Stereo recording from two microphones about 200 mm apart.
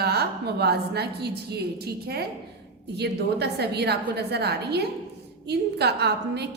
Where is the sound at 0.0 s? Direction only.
55° right (ahead or behind).